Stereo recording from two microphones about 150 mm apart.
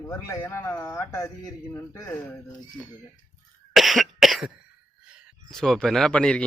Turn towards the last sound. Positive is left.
turn(degrees=5)  # may be behind; listen again after turning